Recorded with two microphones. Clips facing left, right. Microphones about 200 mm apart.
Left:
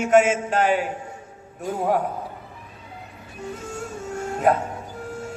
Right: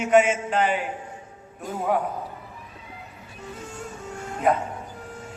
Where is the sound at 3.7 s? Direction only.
45° left (ahead or behind).